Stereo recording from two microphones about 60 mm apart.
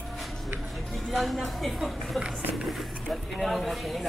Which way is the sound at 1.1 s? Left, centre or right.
Centre.